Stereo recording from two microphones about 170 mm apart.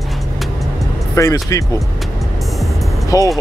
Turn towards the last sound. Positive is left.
turn(degrees=20)  # may be behind; listen again after turning